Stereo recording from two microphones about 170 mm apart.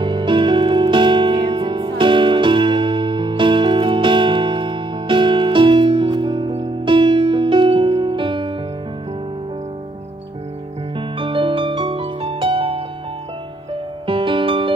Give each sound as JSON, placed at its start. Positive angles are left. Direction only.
{"t": 0.0, "sound": "music", "side_deg": -30}
{"t": 11.0, "sound": "music", "side_deg": -30}
{"t": 14.0, "sound": "music", "side_deg": -30}